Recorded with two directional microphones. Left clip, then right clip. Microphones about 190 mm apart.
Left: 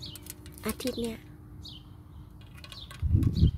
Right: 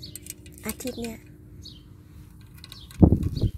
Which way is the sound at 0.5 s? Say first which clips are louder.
Left 1 dB; 15° left (ahead or behind).